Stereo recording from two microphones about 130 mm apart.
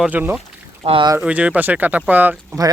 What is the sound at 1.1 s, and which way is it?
Speech, 10° right (ahead or behind).